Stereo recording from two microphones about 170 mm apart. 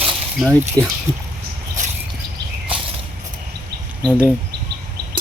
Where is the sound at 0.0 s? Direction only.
Centre (ahead or behind).